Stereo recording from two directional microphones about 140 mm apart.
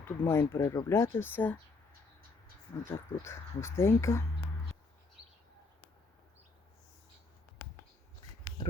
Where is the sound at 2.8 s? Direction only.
20° left (ahead or behind).